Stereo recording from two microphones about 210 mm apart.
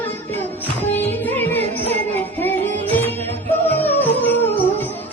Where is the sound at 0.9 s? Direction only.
10° left (ahead or behind).